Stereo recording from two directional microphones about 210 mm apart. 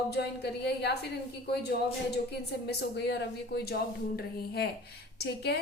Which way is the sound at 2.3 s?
50° left (ahead or behind).